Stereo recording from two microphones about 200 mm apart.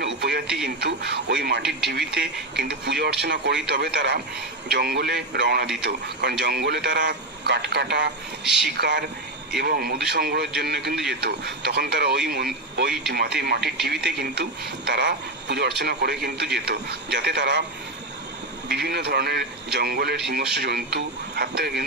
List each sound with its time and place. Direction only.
0.0 s radio: 55° right (ahead or behind)
0.7 s speech: 55° right (ahead or behind)
1.6 s speech: centre (ahead or behind)
1.9 s a man's voice: 55° right (ahead or behind)
8.5 s speech: centre (ahead or behind)
8.7 s a man's voice: 60° right (ahead or behind)
18.7 s a man's voice: 55° right (ahead or behind)